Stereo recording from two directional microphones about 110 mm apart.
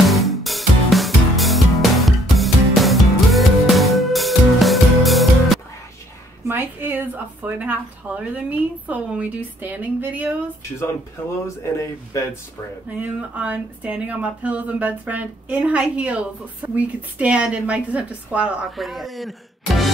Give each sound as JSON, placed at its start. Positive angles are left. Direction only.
{"t": 0.0, "sound": "music", "side_deg": 0}
{"t": 6.4, "sound": "speech", "side_deg": -20}
{"t": 10.8, "sound": "speech", "side_deg": 25}
{"t": 13.0, "sound": "speech", "side_deg": -15}
{"t": 18.8, "sound": "speech", "side_deg": 0}